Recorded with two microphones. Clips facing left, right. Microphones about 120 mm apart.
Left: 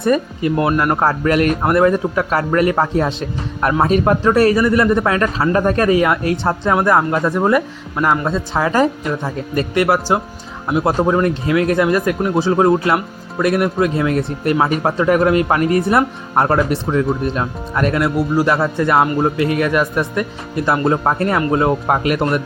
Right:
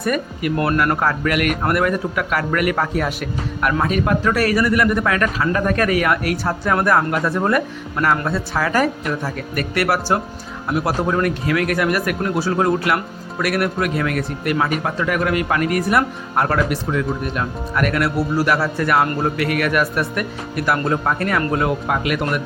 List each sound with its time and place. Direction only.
0.0 s speech: 25° left (ahead or behind)
21.8 s speech: 40° left (ahead or behind)